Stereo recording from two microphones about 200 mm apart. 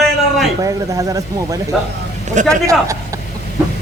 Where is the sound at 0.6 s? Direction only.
15° right (ahead or behind).